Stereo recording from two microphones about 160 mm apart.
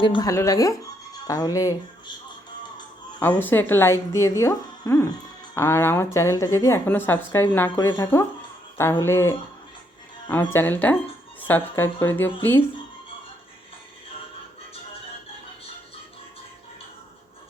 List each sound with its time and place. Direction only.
0.0 s speech: 25° left (ahead or behind)
3.2 s a woman's voice: 10° left (ahead or behind)
10.5 s a woman's voice: 10° left (ahead or behind)